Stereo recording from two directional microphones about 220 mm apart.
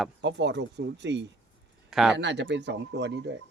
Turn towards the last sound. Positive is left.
turn(degrees=-50)  # may be behind; listen again after turning